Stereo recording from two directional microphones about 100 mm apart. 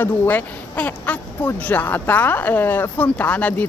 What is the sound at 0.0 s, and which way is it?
Speech, 20° left (ahead or behind).